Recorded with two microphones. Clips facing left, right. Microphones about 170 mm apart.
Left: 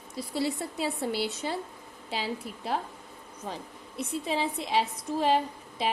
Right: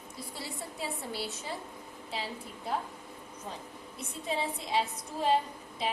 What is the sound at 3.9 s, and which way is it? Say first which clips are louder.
A woman's voice: left 5 dB; 75° left (ahead or behind).